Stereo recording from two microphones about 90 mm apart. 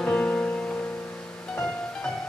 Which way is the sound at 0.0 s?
15° left (ahead or behind).